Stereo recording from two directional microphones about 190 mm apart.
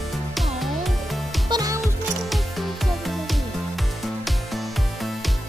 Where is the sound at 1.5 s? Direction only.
20° right (ahead or behind).